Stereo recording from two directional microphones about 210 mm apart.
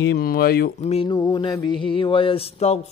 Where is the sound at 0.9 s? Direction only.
25° left (ahead or behind).